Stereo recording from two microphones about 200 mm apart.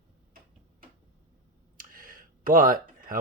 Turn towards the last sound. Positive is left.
turn(degrees=-45)  # may be behind; listen again after turning